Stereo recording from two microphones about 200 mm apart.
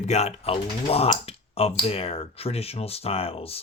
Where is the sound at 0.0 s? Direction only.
35° left (ahead or behind).